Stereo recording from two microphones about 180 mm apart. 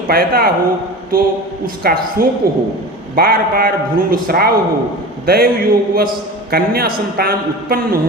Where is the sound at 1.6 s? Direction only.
55° right (ahead or behind).